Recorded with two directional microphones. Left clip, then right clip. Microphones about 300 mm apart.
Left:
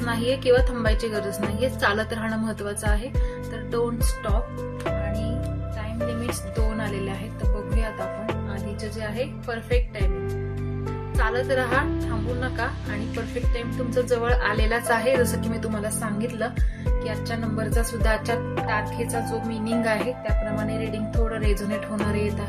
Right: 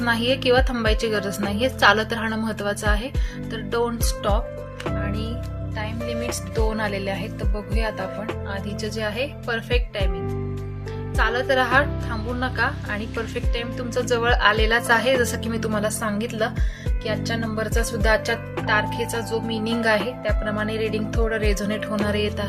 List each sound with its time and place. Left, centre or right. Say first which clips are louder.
0.0 s speech: right 3 dB; right
6.7 s speech: right 4 dB; right
8.8 s speech: right 4 dB; right
11.2 s speech: right 4 dB; right